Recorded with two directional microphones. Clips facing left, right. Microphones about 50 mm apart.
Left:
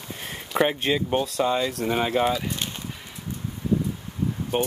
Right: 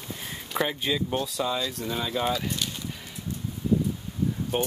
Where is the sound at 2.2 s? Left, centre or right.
Centre.